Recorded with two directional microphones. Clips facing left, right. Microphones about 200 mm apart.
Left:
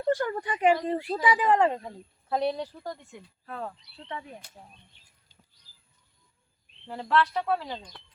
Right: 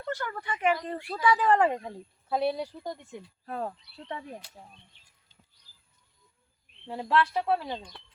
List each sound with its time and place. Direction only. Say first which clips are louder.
0.0 s speech: left 8 dB; 30° left (ahead or behind)
1.5 s speech: left 1 dB; 10° right (ahead or behind)
3.4 s speech: right 3 dB; 35° right (ahead or behind)
6.8 s speech: left 1 dB; 15° right (ahead or behind)